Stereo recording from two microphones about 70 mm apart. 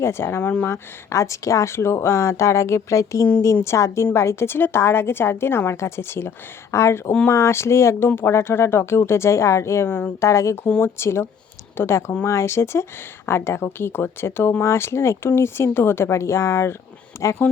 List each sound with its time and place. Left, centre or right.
0.0 s a woman's voice: left